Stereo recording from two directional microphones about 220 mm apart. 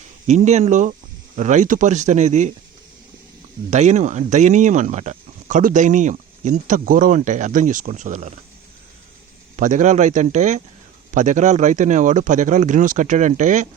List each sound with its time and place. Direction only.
0.3 s speech: 30° right (ahead or behind)
3.7 s speech: 30° right (ahead or behind)
9.6 s speech: 35° right (ahead or behind)